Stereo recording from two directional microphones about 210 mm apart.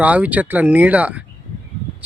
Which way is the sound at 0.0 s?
5° right (ahead or behind).